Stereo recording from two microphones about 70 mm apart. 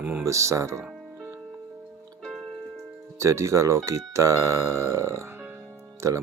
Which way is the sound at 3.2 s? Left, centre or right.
Right.